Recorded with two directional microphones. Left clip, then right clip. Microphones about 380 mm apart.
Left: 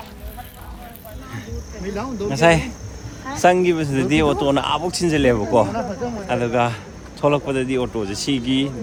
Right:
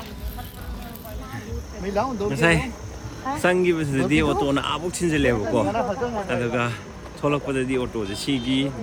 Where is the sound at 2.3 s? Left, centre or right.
Centre.